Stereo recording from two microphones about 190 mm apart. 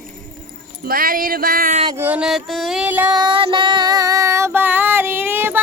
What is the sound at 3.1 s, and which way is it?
Music, 25° right (ahead or behind).